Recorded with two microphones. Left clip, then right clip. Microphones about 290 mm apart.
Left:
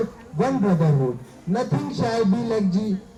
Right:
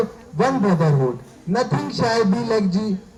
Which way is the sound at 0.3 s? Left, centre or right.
Right.